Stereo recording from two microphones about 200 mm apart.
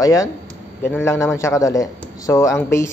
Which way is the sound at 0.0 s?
15° left (ahead or behind).